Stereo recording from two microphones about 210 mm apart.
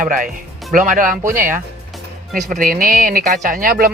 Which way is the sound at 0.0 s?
40° right (ahead or behind).